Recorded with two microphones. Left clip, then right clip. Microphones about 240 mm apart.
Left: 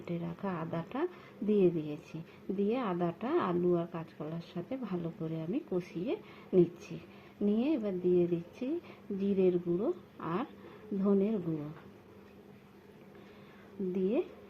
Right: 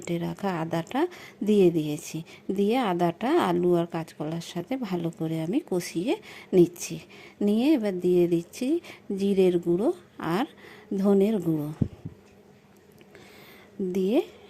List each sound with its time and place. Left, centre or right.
0.0 s speech: right
13.9 s speech: right